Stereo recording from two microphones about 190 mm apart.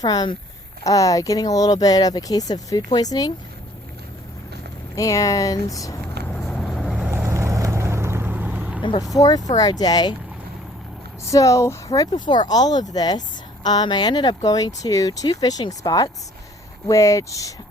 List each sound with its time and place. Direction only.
0.0 s speech: 20° left (ahead or behind)
4.9 s speech: 15° left (ahead or behind)
6.2 s vehicle: 5° left (ahead or behind)
8.8 s speech: 25° left (ahead or behind)
11.3 s speech: 15° left (ahead or behind)